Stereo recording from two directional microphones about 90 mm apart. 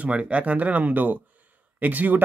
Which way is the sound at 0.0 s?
15° right (ahead or behind).